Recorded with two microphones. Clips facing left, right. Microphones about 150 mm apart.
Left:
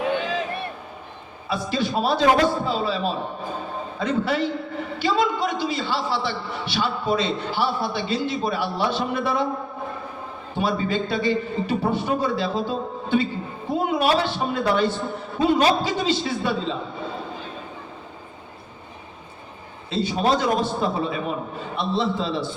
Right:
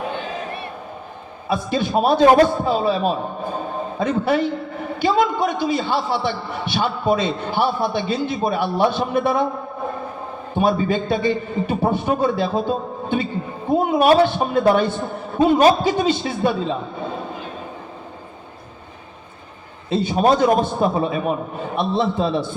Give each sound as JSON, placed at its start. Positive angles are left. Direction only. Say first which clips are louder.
{"t": 1.5, "sound": "a man's voice", "louder": "right 3 dB", "side_deg": -50}
{"t": 10.6, "sound": "a man's voice", "louder": "right 5 dB", "side_deg": -50}
{"t": 19.9, "sound": "a man's voice", "louder": "right 5 dB", "side_deg": -50}